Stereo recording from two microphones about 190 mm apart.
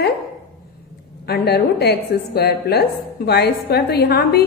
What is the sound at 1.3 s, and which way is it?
A woman's voice, 55° left (ahead or behind).